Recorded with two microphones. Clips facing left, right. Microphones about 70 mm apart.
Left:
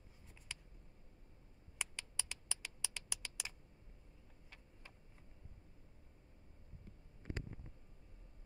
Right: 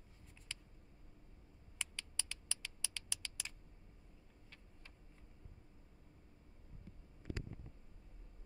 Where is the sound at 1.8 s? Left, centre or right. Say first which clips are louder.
Left 1 dB; centre.